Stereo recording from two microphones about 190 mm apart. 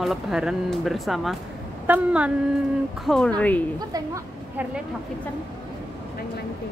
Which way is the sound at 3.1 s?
5° left (ahead or behind).